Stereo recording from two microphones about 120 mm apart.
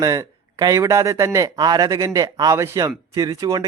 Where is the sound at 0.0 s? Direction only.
30° right (ahead or behind).